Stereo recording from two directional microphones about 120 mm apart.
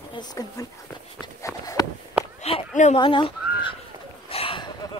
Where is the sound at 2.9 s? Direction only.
45° left (ahead or behind).